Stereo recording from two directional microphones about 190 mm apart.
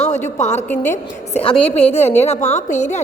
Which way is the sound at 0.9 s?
30° left (ahead or behind).